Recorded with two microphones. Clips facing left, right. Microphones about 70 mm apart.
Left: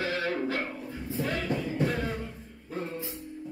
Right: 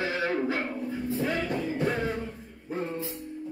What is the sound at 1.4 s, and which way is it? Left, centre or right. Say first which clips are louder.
Music: right 1 dB; right.